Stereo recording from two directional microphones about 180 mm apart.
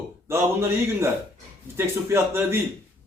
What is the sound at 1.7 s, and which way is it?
Speech, 15° right (ahead or behind).